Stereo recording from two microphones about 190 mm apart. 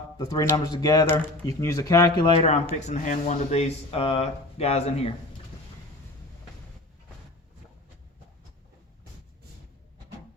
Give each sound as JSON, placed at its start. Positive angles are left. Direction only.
{"t": 0.2, "sound": "speech", "side_deg": 20}